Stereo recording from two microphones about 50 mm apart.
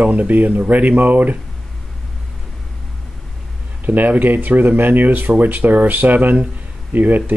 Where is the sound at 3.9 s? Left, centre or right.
Right.